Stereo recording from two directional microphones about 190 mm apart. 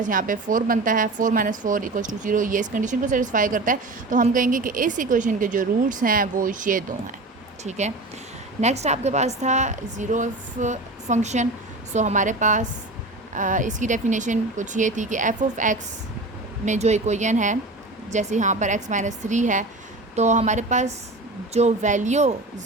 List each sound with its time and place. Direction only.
0.0 s a woman's voice: 45° right (ahead or behind)